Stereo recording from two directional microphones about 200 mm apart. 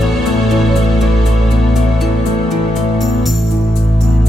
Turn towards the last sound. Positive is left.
turn(degrees=0)  # may be behind; listen again after turning